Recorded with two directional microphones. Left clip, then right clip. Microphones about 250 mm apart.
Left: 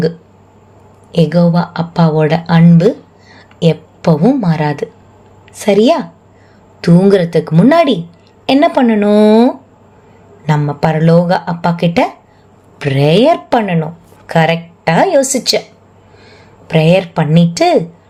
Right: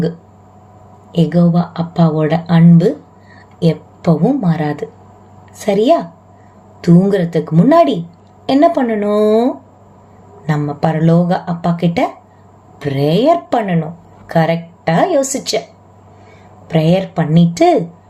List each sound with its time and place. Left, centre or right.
1.1 s a woman's voice: left
17.2 s speech: left